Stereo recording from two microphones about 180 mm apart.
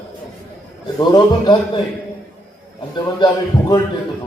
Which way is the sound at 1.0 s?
25° left (ahead or behind).